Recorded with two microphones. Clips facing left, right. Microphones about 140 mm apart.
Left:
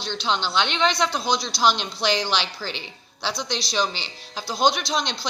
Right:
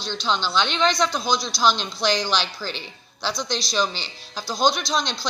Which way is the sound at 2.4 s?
20° left (ahead or behind).